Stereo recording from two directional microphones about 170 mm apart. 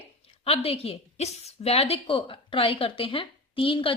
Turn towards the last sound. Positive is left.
turn(degrees=30)  # may be behind; listen again after turning